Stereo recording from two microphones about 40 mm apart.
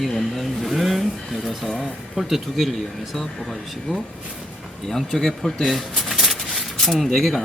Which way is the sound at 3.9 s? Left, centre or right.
Centre.